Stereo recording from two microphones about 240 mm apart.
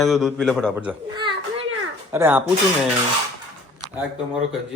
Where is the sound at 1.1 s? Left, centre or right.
Centre.